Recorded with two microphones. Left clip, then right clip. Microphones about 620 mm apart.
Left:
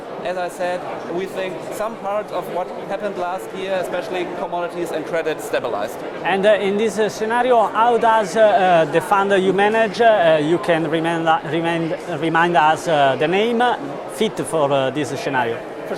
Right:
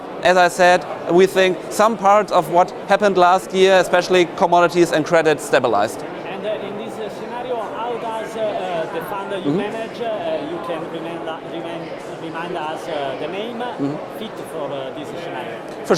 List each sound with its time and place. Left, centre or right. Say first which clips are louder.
0.2 s speech: right 11 dB; right
6.2 s speech: left 11 dB; left
15.9 s speech: right 11 dB; right